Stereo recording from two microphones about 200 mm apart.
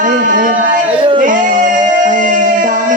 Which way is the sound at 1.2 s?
40° right (ahead or behind).